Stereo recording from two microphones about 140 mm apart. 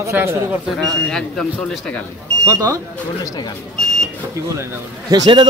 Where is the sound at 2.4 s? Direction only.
25° right (ahead or behind).